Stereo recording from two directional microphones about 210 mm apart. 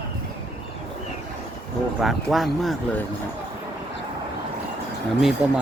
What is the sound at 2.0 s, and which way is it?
Speech, centre (ahead or behind).